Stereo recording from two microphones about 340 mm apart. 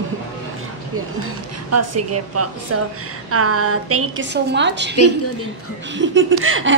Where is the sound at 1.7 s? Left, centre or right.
Right.